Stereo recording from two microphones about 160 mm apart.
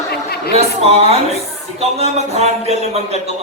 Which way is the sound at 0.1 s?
75° left (ahead or behind).